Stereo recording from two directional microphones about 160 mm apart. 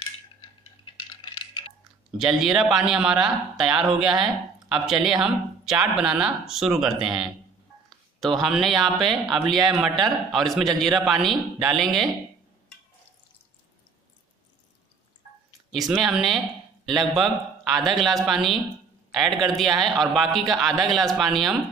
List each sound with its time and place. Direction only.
0.9 s a sound: 35° left (ahead or behind)
2.1 s speech: 5° right (ahead or behind)
15.9 s speech: centre (ahead or behind)